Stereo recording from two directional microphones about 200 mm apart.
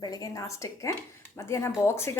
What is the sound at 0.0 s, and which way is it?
A woman's voice, 20° left (ahead or behind).